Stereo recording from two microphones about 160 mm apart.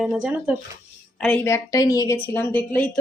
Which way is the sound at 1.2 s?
10° left (ahead or behind).